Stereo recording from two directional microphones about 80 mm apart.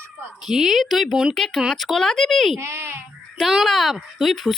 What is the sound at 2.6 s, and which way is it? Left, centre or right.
Speech, right.